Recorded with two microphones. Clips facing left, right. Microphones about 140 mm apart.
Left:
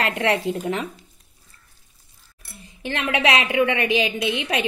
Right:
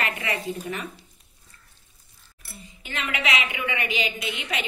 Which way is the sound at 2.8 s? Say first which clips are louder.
Left 7 dB; 90° left.